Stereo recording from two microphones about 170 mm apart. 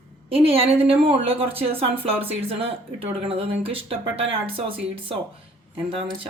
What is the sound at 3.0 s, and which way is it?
Speech, 35° right (ahead or behind).